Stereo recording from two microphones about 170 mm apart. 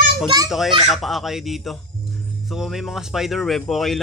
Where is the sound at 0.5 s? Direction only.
Centre (ahead or behind).